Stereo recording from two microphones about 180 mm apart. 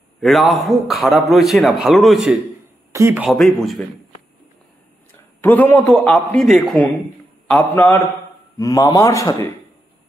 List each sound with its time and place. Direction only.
0.2 s a man's voice: centre (ahead or behind)
2.9 s speech: 15° right (ahead or behind)
3.3 s a man's voice: centre (ahead or behind)
5.4 s a man's voice: 10° left (ahead or behind)
8.5 s a man's voice: 20° left (ahead or behind)